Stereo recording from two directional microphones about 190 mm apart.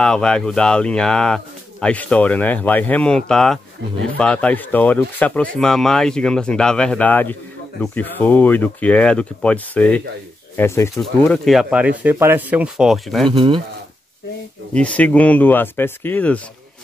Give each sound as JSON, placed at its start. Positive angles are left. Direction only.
{"t": 0.0, "sound": "speech", "side_deg": 5}
{"t": 13.3, "sound": "speech", "side_deg": -30}
{"t": 14.7, "sound": "speech", "side_deg": 5}